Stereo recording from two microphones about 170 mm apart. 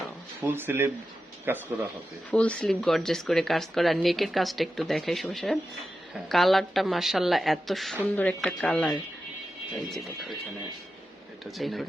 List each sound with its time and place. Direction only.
0.4 s speech: 15° right (ahead or behind)
2.3 s speech: 5° left (ahead or behind)
11.4 s speech: centre (ahead or behind)